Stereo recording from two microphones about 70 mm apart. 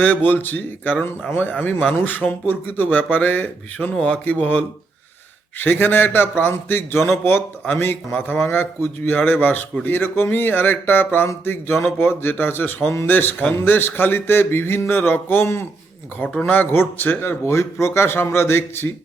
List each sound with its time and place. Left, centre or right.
0.0 s speech: left
8.4 s speech: left